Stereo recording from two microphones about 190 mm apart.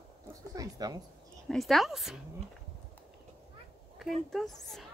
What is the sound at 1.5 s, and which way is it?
Speech, centre (ahead or behind).